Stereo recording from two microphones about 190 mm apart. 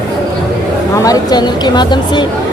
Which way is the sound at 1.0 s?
20° left (ahead or behind).